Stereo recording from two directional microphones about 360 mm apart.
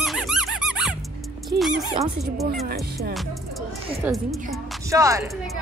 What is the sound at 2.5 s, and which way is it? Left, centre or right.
Speech, right.